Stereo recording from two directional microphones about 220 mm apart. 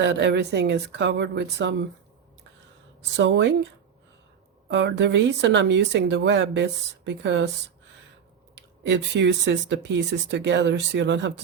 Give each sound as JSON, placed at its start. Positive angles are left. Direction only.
{"t": 0.0, "sound": "a woman's voice", "side_deg": -55}
{"t": 3.2, "sound": "speech", "side_deg": -55}
{"t": 4.7, "sound": "a woman's voice", "side_deg": -55}
{"t": 8.5, "sound": "a woman's voice", "side_deg": -50}